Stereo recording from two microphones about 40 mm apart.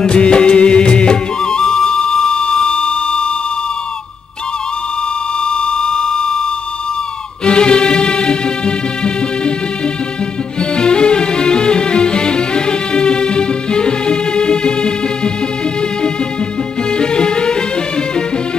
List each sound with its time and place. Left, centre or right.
0.0 s music: left
5.4 s a sound: left
7.4 s music: left
10.6 s music: left
16.9 s music: left